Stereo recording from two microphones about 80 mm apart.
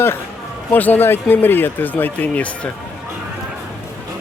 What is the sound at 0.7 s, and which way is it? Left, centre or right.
Speech, left.